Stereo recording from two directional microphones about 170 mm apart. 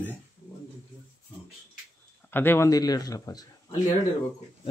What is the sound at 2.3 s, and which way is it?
Speech, 10° left (ahead or behind).